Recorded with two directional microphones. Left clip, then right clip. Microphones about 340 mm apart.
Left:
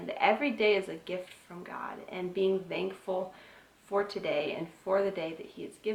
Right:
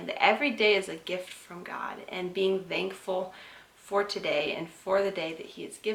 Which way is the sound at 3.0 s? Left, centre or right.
Left.